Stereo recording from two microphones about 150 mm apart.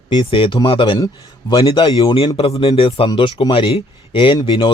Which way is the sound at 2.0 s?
30° left (ahead or behind).